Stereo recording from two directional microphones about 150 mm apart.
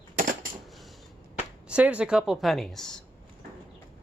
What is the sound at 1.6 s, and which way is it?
Speech, 10° right (ahead or behind).